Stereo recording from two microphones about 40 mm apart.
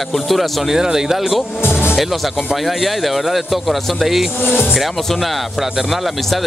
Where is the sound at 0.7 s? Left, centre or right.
Centre.